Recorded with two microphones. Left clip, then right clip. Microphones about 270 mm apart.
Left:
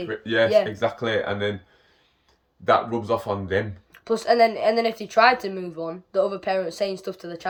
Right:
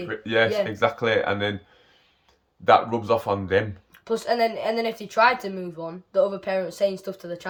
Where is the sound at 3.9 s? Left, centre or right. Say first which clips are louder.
Left 5 dB; centre.